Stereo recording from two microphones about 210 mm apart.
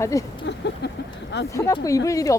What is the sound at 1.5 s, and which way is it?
Speech, 15° left (ahead or behind).